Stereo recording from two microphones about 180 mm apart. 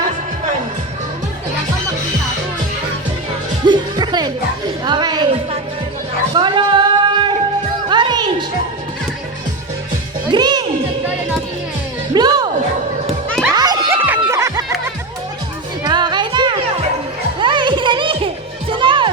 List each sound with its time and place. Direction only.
3.7 s music: 25° right (ahead or behind)
4.9 s a sound: 25° right (ahead or behind)
7.9 s music: 25° right (ahead or behind)
10.2 s music: 25° right (ahead or behind)
12.1 s music: 20° right (ahead or behind)
13.6 s music: 20° right (ahead or behind)
15.8 s music: 25° right (ahead or behind)